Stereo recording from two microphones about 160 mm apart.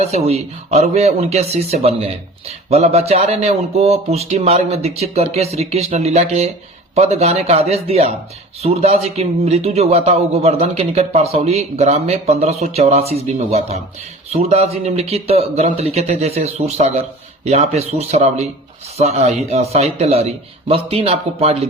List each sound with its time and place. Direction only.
0.0 s a man's voice: 40° right (ahead or behind)